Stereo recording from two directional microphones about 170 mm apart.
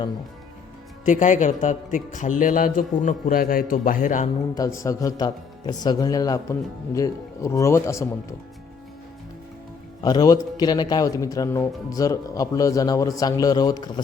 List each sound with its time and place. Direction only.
1.0 s a man's voice: 50° left (ahead or behind)
4.5 s speech: 20° left (ahead or behind)
10.0 s speech: 25° left (ahead or behind)